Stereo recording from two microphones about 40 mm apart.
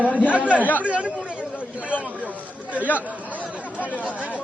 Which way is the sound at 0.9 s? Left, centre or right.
Right.